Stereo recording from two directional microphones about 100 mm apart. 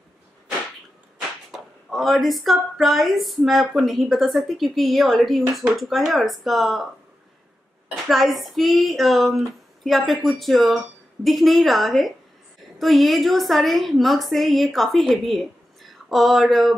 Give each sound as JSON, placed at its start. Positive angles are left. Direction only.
{"t": 1.5, "sound": "speech", "side_deg": 0}
{"t": 7.9, "sound": "speech", "side_deg": 0}